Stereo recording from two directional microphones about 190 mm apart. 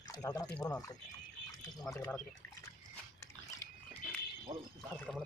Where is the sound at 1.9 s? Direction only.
10° left (ahead or behind).